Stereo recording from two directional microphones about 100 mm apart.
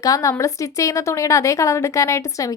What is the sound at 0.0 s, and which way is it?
A woman's voice, 35° left (ahead or behind).